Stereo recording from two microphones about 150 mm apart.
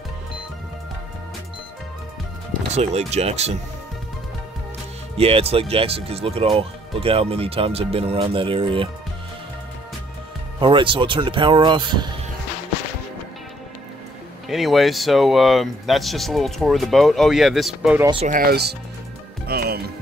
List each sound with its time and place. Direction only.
2.7 s speech: 45° right (ahead or behind)
5.1 s speech: 40° right (ahead or behind)
10.6 s speech: 35° right (ahead or behind)
14.5 s speech: centre (ahead or behind)
18.2 s speech: 70° right (ahead or behind); by 18.8 s 90° right
19.4 s music: 90° right